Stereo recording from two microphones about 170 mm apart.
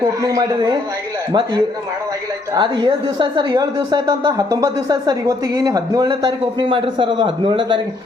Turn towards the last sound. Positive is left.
turn(degrees=-30)  # may be behind; listen again after turning